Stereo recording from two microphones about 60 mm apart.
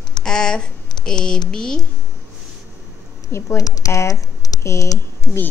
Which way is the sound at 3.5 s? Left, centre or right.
Left.